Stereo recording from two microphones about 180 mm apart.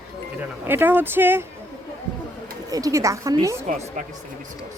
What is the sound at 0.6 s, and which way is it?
Speech, 10° right (ahead or behind).